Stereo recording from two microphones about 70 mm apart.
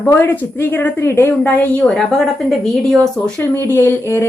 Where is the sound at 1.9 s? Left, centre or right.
Centre.